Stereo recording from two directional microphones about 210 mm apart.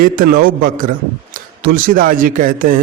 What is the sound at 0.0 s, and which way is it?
A man's voice, 40° right (ahead or behind).